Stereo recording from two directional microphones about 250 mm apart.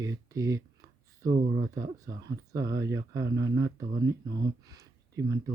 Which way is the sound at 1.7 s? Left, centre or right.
Centre.